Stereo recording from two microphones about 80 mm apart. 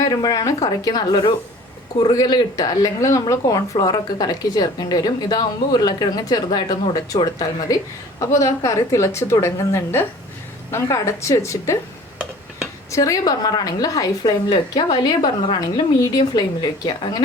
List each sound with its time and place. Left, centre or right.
0.0 s speech: left
2.8 s speech: left
8.2 s a woman's voice: left
12.9 s speech: left